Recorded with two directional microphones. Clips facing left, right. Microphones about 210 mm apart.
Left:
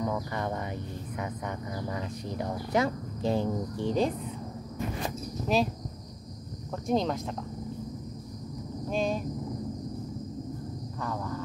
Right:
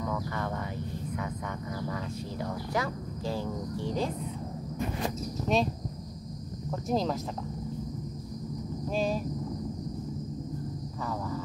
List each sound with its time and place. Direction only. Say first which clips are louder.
0.0 s a sound: left 2 dB; 20° left (ahead or behind)
1.8 s speech: even; 20° left (ahead or behind)
5.5 s speech: left 1 dB; centre (ahead or behind)
6.9 s speech: left 2 dB; centre (ahead or behind)
8.9 s speech: left 1 dB; 5° right (ahead or behind)
11.1 s a sound: even; 5° right (ahead or behind)